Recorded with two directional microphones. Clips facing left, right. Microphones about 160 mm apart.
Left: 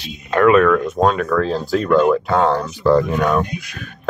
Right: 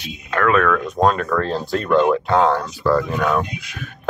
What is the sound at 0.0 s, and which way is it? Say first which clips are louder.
Speech: left 6 dB; 25° left (ahead or behind).